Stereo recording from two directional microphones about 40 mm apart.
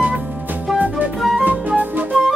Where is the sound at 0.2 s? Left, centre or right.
Right.